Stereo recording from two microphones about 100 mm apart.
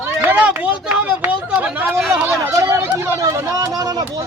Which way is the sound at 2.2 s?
30° right (ahead or behind).